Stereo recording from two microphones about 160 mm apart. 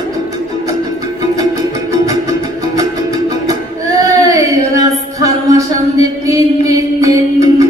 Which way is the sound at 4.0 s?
20° right (ahead or behind).